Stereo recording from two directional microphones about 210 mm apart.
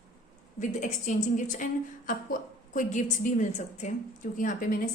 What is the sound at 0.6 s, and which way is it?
A woman's voice, 35° left (ahead or behind).